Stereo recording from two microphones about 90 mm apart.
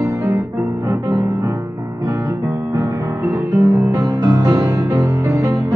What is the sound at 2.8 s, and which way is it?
Music, 35° right (ahead or behind).